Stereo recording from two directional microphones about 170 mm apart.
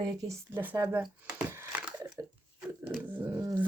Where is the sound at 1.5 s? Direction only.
10° right (ahead or behind).